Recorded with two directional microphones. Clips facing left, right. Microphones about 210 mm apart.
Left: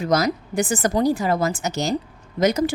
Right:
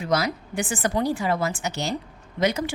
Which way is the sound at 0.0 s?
40° left (ahead or behind).